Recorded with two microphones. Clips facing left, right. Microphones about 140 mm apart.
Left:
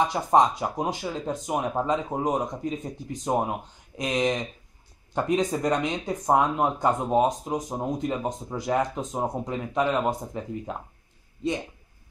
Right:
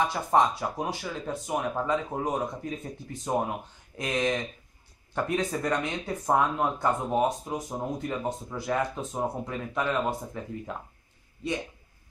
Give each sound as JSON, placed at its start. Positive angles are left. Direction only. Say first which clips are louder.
{"t": 0.0, "sound": "speech", "louder": "left 3 dB", "side_deg": 20}